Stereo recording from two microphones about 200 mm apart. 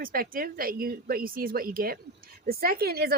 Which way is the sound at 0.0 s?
45° right (ahead or behind).